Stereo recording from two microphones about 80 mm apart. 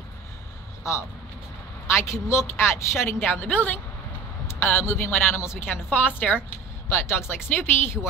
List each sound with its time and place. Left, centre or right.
2.0 s a woman's voice: left